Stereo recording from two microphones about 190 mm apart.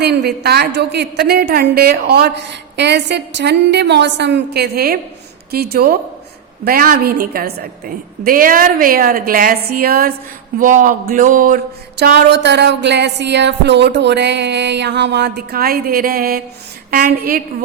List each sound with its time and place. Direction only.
0.0 s a woman's voice: 60° right (ahead or behind)